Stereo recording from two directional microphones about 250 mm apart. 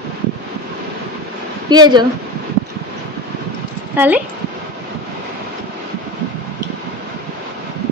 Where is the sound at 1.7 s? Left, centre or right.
Centre.